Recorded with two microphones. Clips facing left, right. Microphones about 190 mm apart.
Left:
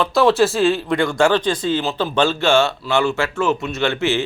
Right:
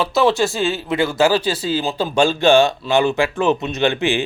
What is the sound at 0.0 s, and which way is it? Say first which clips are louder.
Speech: left 2 dB; centre (ahead or behind).